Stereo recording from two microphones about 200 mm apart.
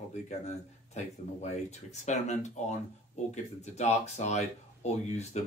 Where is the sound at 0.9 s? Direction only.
35° left (ahead or behind).